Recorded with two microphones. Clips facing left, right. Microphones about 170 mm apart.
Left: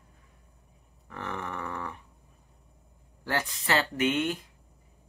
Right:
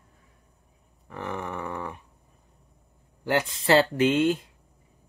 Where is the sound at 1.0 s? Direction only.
15° right (ahead or behind).